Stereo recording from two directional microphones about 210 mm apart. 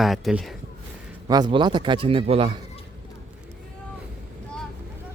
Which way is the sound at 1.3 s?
20° right (ahead or behind).